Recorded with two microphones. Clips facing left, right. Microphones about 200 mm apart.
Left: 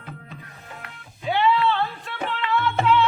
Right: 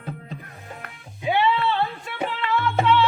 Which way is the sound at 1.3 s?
15° right (ahead or behind).